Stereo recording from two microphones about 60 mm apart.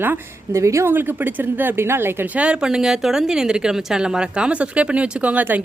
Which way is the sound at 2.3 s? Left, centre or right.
Centre.